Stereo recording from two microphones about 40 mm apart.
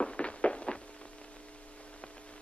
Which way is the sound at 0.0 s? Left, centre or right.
Left.